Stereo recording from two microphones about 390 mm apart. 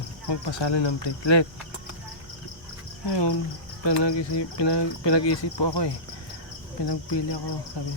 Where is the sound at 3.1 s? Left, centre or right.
Left.